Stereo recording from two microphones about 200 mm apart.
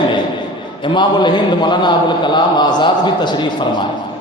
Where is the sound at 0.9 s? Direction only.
20° left (ahead or behind).